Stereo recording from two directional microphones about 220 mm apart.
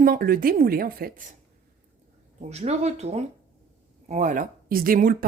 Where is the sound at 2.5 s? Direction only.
30° right (ahead or behind).